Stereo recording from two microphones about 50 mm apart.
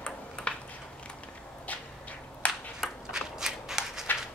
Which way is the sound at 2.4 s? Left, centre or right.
Left.